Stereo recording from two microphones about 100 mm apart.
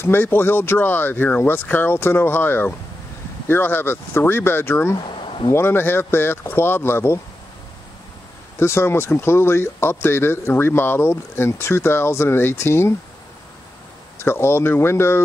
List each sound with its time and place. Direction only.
0.0 s speech: 20° left (ahead or behind)
8.5 s speech: 25° left (ahead or behind)
14.1 s speech: 25° left (ahead or behind)